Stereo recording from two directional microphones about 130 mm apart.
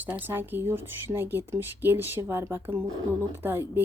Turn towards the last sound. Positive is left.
turn(degrees=-15)  # may be behind; listen again after turning